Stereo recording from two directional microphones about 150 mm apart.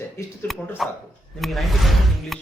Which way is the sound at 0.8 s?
Centre (ahead or behind).